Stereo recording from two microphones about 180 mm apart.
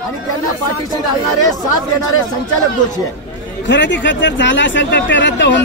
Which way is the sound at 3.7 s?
90° left.